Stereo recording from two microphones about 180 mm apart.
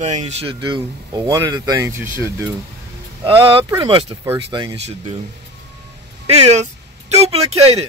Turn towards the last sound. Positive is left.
turn(degrees=-35)  # may be behind; listen again after turning